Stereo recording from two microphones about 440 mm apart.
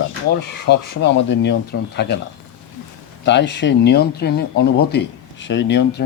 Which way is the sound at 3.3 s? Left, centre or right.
Left.